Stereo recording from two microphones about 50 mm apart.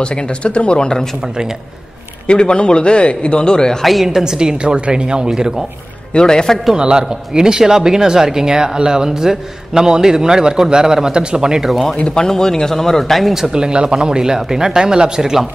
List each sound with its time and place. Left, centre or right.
0.0 s a man's voice: left
2.2 s a man's voice: centre
3.8 s speech: centre
6.1 s speech: centre
6.7 s speech: centre
11.8 s speech: centre
13.3 s speech: centre